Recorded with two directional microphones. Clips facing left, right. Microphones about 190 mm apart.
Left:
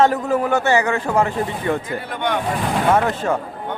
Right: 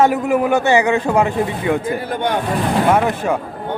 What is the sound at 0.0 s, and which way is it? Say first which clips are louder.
Speech: right 2 dB; 10° right (ahead or behind).